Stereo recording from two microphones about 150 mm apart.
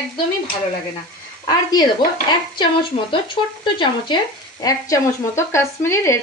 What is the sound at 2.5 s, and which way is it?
A woman's voice, 35° left (ahead or behind).